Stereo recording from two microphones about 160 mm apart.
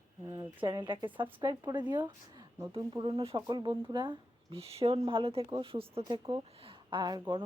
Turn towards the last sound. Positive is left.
turn(degrees=-25)  # may be behind; listen again after turning